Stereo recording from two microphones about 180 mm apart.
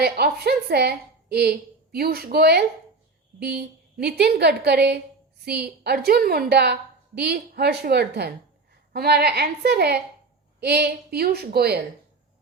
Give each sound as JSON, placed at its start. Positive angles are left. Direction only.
{"t": 0.0, "sound": "a woman's voice", "side_deg": -65}